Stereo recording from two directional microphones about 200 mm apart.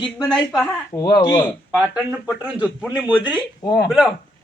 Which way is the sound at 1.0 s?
20° left (ahead or behind).